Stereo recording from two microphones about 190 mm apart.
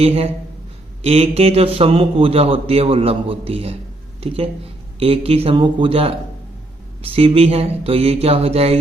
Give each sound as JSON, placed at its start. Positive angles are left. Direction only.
{"t": 0.0, "sound": "a man's voice", "side_deg": -30}
{"t": 4.9, "sound": "a man's voice", "side_deg": -30}